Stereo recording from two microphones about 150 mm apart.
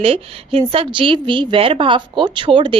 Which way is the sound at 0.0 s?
40° right (ahead or behind).